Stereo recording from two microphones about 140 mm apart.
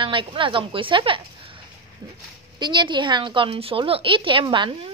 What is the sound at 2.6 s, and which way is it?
A woman's voice, 35° right (ahead or behind).